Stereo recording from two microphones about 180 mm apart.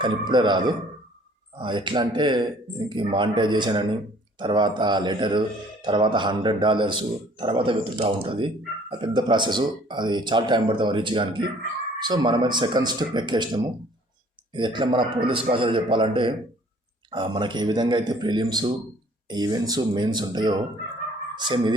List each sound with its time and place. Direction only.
0.0 s a man's voice: 25° right (ahead or behind)